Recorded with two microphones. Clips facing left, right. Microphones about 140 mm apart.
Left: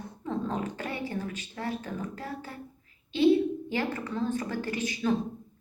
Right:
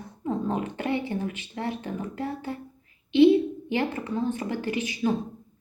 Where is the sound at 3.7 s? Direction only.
20° right (ahead or behind).